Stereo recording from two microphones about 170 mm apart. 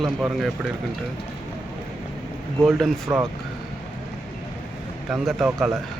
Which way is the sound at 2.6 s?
Centre (ahead or behind).